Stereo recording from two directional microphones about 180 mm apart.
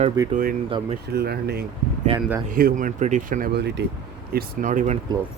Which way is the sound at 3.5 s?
70° right (ahead or behind).